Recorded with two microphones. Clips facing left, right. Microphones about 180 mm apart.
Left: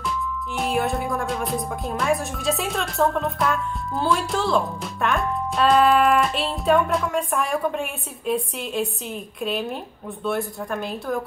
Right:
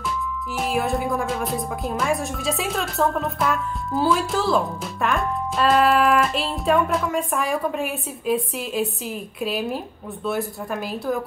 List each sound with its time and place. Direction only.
0.6 s speech: centre (ahead or behind)